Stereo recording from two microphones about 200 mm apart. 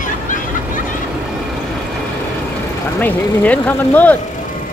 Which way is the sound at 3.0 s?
10° left (ahead or behind).